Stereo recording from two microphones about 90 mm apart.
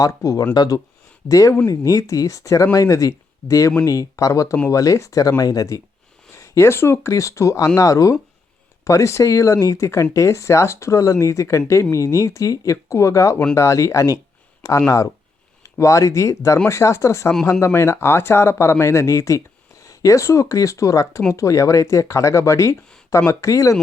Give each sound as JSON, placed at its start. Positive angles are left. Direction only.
{"t": 0.0, "sound": "speech", "side_deg": 35}
{"t": 0.5, "sound": "speech", "side_deg": 50}
{"t": 1.3, "sound": "speech", "side_deg": 35}